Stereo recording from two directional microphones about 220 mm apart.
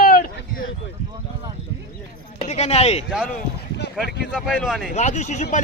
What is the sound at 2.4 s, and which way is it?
Speech, 30° left (ahead or behind).